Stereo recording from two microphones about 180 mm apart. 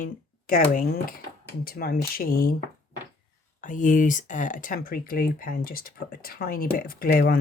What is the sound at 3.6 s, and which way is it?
Speech, 45° left (ahead or behind).